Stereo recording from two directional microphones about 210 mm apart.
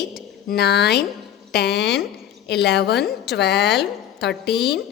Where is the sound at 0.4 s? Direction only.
50° left (ahead or behind).